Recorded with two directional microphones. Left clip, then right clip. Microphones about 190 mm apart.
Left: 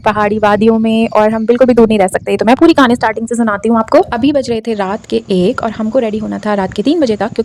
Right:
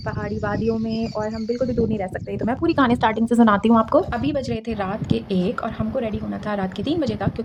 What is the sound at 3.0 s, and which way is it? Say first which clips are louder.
Speech: left 4 dB; 20° left (ahead or behind).